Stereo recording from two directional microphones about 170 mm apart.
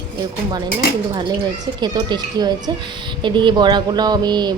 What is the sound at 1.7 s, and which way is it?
Speech, 25° right (ahead or behind).